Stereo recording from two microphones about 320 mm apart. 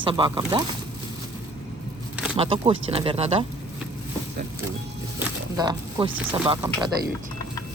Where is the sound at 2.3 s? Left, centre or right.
Centre.